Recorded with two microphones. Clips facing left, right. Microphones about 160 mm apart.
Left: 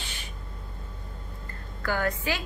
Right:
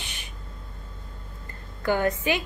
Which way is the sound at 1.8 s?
20° right (ahead or behind).